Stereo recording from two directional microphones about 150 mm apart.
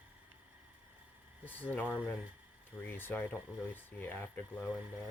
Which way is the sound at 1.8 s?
10° right (ahead or behind).